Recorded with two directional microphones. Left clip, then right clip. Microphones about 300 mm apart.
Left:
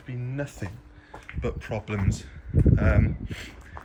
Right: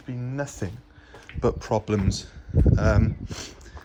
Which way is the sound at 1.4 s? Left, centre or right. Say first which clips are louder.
Right 8 dB; centre.